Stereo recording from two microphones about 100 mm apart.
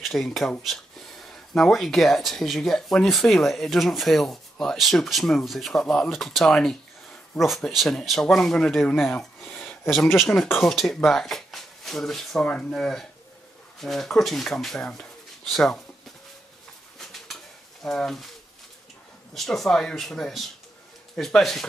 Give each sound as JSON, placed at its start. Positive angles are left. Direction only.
{"t": 0.0, "sound": "speech", "side_deg": 0}
{"t": 9.4, "sound": "a sound", "side_deg": 15}
{"t": 10.6, "sound": "speech", "side_deg": 5}
{"t": 17.0, "sound": "bird", "side_deg": 0}
{"t": 17.8, "sound": "speech", "side_deg": 5}
{"t": 19.3, "sound": "speech", "side_deg": 0}